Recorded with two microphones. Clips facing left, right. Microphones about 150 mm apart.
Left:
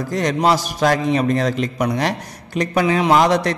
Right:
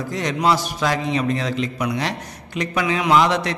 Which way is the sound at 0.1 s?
45° left (ahead or behind).